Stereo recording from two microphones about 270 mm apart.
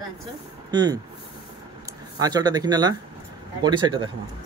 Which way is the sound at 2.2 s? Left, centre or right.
Centre.